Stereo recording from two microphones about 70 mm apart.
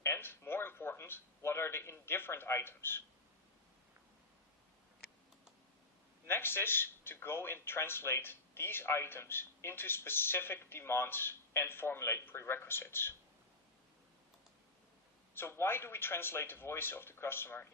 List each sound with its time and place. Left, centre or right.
0.0 s a sound: left
1.4 s a man's voice: left
6.2 s a man's voice: left
15.4 s a man's voice: left